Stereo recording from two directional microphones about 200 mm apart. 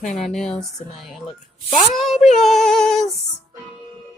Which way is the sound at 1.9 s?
Centre (ahead or behind).